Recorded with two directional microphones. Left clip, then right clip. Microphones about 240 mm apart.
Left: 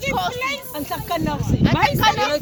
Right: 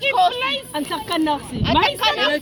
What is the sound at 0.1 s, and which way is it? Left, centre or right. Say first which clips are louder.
Speech: right 5 dB; centre.